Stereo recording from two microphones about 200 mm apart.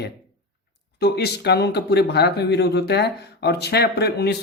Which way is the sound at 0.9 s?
55° left (ahead or behind).